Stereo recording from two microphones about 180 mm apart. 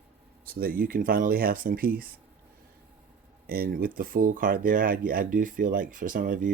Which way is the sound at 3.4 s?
55° right (ahead or behind).